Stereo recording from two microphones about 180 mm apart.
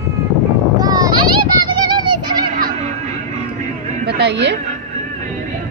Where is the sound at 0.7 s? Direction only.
20° right (ahead or behind).